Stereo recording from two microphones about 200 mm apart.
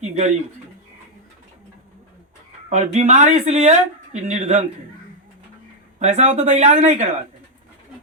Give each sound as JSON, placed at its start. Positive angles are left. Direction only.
{"t": 0.0, "sound": "a sound", "side_deg": -35}
{"t": 2.6, "sound": "speech", "side_deg": -35}
{"t": 6.0, "sound": "speech", "side_deg": -35}